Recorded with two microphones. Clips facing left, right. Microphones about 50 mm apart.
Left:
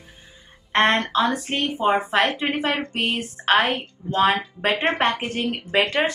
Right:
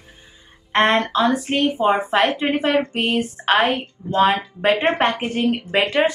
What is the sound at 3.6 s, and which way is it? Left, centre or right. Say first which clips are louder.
Speech: right 4 dB; centre.